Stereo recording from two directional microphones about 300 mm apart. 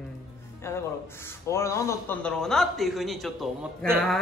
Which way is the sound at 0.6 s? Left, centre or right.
Centre.